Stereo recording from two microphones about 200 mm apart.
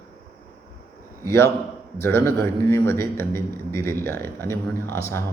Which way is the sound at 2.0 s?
10° left (ahead or behind).